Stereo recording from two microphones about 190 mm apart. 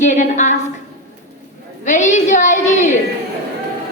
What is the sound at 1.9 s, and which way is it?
Speech, 40° left (ahead or behind).